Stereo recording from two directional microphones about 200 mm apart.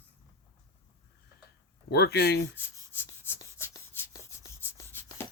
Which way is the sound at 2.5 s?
10° left (ahead or behind).